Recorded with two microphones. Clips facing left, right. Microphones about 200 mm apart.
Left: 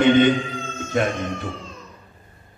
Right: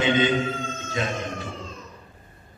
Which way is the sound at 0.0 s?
60° left (ahead or behind).